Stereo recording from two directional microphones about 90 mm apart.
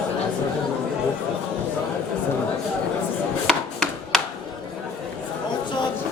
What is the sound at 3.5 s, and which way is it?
Chopping, 5° left (ahead or behind).